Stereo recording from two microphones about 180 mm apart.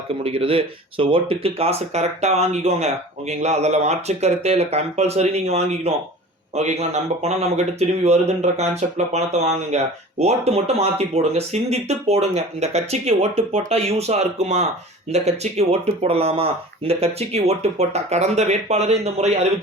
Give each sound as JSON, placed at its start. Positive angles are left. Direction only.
{"t": 0.2, "sound": "speech", "side_deg": -30}